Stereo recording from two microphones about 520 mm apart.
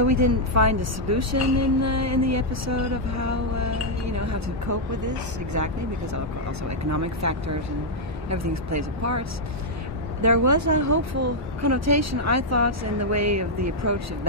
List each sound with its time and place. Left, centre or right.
0.0 s a woman's voice: right
6.9 s a woman's voice: right
10.2 s a woman's voice: right